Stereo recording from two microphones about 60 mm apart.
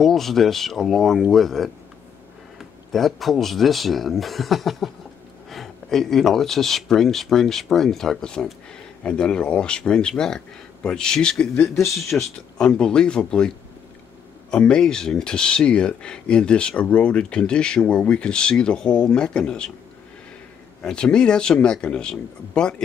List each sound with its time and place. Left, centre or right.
0.0 s speech: centre
2.9 s speech: centre
11.9 s speech: centre
12.5 s speech: centre
14.5 s speech: centre
20.8 s speech: centre